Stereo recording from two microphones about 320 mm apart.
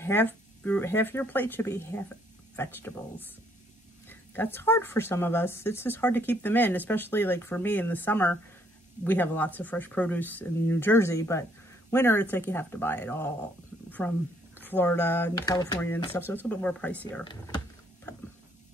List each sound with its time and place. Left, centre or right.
0.0 s speech: centre